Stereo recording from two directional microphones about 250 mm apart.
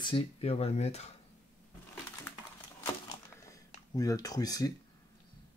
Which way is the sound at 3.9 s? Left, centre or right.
Centre.